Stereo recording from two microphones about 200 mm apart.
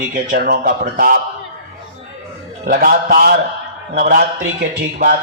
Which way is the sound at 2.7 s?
45° right (ahead or behind).